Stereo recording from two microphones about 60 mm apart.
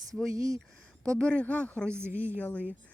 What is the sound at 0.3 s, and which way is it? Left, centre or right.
Speech, right.